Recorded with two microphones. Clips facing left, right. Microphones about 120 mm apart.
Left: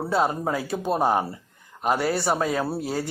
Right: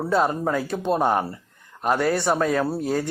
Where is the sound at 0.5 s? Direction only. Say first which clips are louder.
Right 2 dB; 5° left (ahead or behind).